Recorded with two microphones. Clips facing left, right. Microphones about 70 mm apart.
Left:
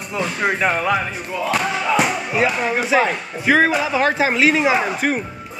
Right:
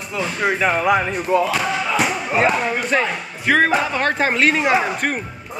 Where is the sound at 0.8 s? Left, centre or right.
Centre.